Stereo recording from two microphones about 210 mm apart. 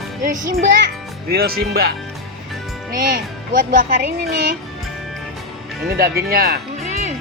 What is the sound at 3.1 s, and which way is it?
Speech, 40° right (ahead or behind).